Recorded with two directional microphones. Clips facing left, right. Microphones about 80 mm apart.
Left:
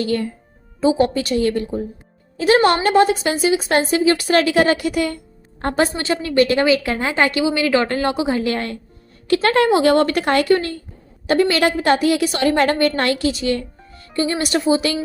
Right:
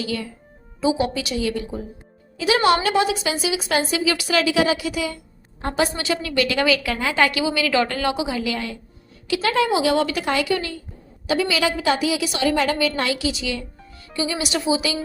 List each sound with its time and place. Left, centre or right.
0.0 s a woman's voice: left
5.7 s a woman's voice: left
6.6 s a woman's voice: left